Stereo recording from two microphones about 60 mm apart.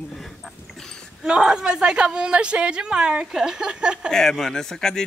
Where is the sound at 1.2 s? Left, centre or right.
Centre.